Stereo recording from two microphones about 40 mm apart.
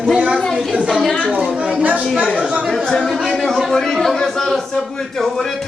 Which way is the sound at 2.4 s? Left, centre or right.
Right.